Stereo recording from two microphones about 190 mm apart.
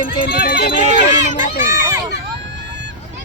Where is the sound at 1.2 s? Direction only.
40° left (ahead or behind).